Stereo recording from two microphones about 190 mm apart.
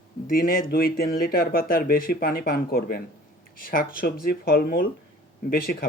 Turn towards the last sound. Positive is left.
turn(degrees=50)  # may be behind; listen again after turning